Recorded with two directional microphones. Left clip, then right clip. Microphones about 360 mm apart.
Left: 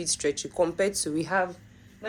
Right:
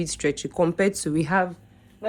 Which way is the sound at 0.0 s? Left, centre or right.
Centre.